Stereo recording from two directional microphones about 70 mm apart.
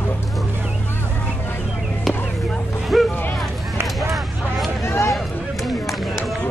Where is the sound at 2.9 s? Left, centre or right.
Centre.